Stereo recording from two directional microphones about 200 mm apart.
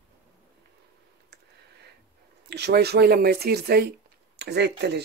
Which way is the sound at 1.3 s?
55° right (ahead or behind).